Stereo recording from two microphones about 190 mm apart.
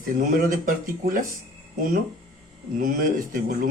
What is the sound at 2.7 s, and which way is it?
Speech, 45° right (ahead or behind).